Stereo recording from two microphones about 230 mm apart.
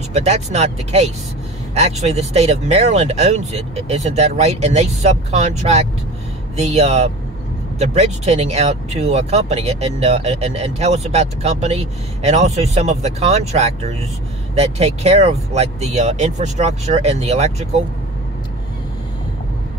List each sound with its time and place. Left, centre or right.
0.1 s speech: right